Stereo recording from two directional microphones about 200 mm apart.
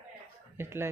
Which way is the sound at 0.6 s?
10° right (ahead or behind).